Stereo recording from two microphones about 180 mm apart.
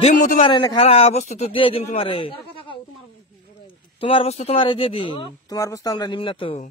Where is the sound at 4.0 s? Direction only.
30° left (ahead or behind).